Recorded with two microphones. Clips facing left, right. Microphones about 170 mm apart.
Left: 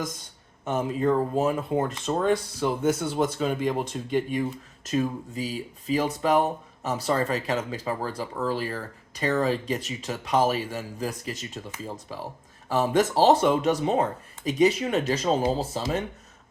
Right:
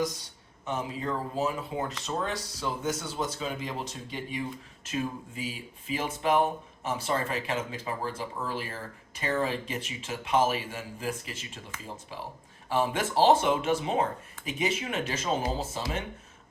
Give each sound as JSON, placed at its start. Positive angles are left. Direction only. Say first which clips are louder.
{"t": 0.6, "sound": "speech", "louder": "left 8 dB", "side_deg": 50}
{"t": 4.9, "sound": "speech", "louder": "left 6 dB", "side_deg": 40}
{"t": 12.6, "sound": "speech", "louder": "left 6 dB", "side_deg": 40}